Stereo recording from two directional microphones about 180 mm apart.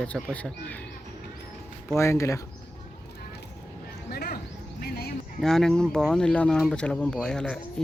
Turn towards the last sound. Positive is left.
turn(degrees=5)  # may be behind; listen again after turning